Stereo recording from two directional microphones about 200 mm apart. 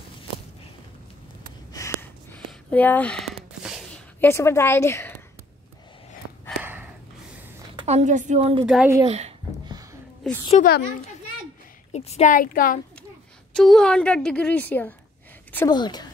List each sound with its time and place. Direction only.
1.7 s a sound: 15° left (ahead or behind)
4.2 s a woman's voice: 10° left (ahead or behind)
6.6 s gasp: 10° right (ahead or behind)
7.7 s a woman's voice: 35° right (ahead or behind)
8.6 s a woman's voice: centre (ahead or behind)
9.0 s a sound: 30° right (ahead or behind)
10.6 s a woman's voice: 40° left (ahead or behind)
11.9 s a woman's voice: 35° left (ahead or behind)
13.6 s a woman's voice: 5° left (ahead or behind); by 16.1 s 20° left (ahead or behind)